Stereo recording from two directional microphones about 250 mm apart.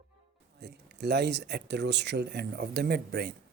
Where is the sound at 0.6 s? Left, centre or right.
Right.